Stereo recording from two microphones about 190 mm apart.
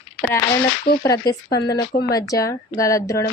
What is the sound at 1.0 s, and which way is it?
A woman's voice, 20° left (ahead or behind).